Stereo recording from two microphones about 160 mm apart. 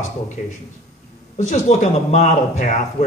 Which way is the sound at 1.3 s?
50° left (ahead or behind).